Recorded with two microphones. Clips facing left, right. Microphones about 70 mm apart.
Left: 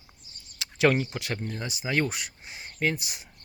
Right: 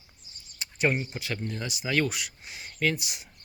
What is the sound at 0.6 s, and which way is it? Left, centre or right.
Speech, left.